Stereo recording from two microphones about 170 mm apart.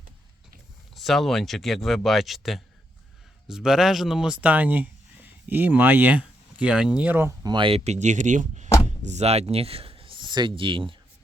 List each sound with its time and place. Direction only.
0.9 s speech: centre (ahead or behind)
7.4 s speech: 30° right (ahead or behind)